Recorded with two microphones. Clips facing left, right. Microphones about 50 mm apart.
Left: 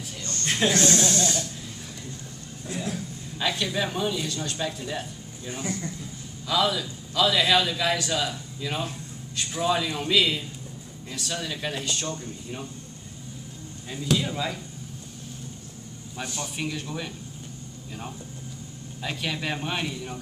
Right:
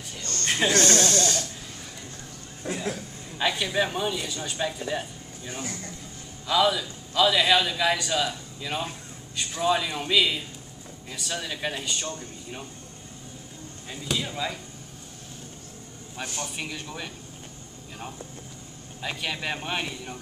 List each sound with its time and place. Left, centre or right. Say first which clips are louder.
0.5 s a sound: even; centre
0.7 s speech: right 1 dB; right
1.0 s speech: even; centre
2.7 s a sound: right 1 dB; right
3.3 s a man's voice: right 2 dB; centre
13.8 s speech: left 4 dB; centre
16.5 s speech: left 3 dB; centre
19.0 s speech: left 1 dB; centre